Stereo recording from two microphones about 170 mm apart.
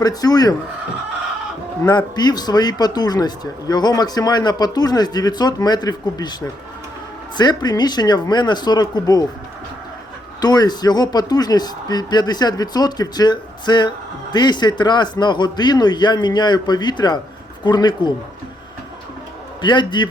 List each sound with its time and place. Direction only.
0.0 s speech: 25° left (ahead or behind)
1.8 s speech: 25° left (ahead or behind)
10.4 s speech: 25° left (ahead or behind)
19.6 s speech: 25° left (ahead or behind)